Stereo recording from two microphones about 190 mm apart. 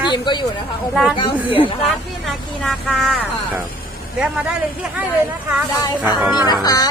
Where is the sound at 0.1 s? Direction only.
25° left (ahead or behind).